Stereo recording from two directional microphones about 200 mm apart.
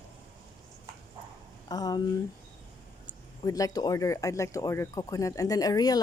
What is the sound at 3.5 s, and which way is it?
Speech, 15° left (ahead or behind).